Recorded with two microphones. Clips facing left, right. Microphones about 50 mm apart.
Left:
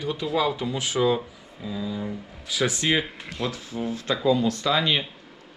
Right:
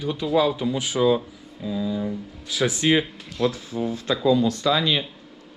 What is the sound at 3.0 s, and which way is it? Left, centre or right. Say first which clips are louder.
Speech: right 6 dB; left.